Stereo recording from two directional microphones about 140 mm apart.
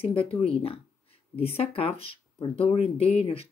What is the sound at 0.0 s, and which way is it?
Speech, 40° left (ahead or behind).